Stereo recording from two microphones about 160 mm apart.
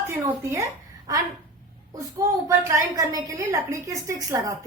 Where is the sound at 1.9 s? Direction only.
20° right (ahead or behind).